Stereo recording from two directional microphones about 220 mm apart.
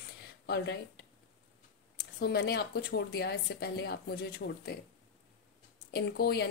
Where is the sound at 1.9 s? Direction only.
50° left (ahead or behind).